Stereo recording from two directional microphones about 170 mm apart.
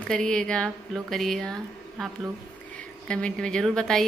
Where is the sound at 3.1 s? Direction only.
5° left (ahead or behind).